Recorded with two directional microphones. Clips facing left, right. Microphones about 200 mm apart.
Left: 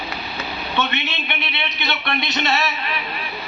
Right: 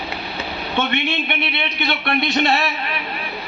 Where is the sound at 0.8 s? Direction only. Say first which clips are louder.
Right 4 dB; 50° right (ahead or behind).